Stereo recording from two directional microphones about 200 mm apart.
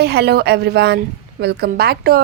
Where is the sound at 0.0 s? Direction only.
55° right (ahead or behind).